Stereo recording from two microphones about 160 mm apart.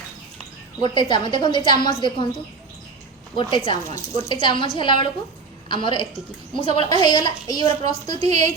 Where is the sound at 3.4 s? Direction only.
30° left (ahead or behind).